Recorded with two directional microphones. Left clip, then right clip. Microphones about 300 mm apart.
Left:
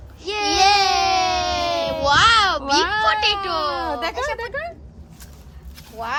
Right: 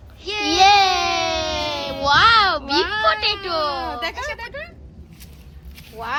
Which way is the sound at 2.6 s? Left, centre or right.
Left.